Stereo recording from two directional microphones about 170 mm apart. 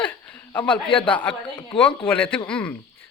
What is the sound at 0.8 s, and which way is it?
Speech, 30° left (ahead or behind).